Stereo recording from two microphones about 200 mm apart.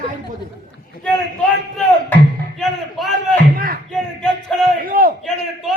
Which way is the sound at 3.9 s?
Centre (ahead or behind).